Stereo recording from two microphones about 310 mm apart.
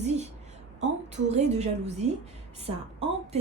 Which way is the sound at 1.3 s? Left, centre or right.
Right.